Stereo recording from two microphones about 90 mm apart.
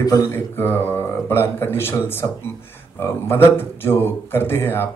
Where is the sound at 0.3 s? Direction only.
25° left (ahead or behind).